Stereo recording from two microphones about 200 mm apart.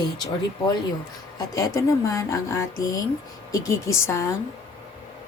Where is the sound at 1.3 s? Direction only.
15° left (ahead or behind).